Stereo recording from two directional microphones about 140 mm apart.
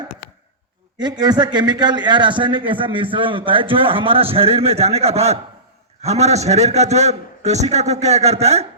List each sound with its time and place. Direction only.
0.9 s a man's voice: 30° right (ahead or behind); by 8.6 s 50° right (ahead or behind)